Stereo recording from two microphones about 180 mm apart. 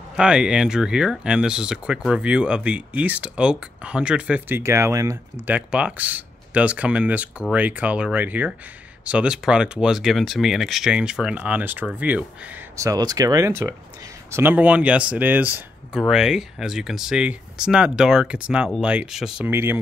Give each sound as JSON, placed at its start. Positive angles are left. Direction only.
{"t": 0.1, "sound": "speech", "side_deg": -5}
{"t": 12.7, "sound": "speech", "side_deg": -20}